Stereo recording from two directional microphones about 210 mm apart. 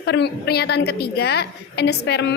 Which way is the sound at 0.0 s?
50° left (ahead or behind).